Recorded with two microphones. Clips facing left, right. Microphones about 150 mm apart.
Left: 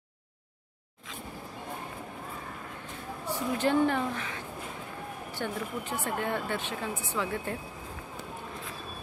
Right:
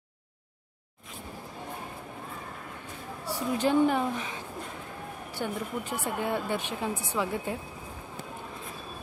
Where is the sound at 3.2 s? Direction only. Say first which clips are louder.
Right 1 dB; 10° right (ahead or behind).